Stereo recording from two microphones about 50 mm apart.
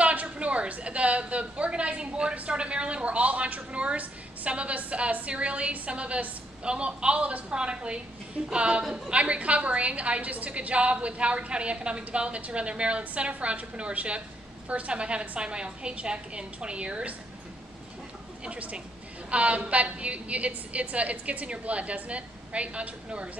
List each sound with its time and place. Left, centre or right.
0.0 s a woman's voice: right
18.4 s a woman's voice: right